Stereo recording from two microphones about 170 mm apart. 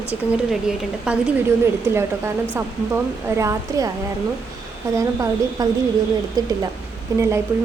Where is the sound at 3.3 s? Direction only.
15° right (ahead or behind).